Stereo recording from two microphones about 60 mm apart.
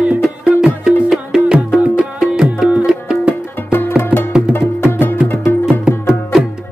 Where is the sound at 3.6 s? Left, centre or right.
Left.